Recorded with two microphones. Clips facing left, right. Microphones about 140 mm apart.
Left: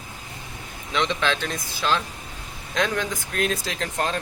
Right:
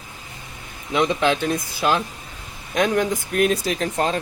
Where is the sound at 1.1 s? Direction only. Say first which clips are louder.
Right 5 dB; 15° right (ahead or behind).